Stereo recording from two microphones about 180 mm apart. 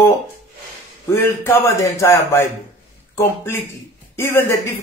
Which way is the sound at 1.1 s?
15° left (ahead or behind).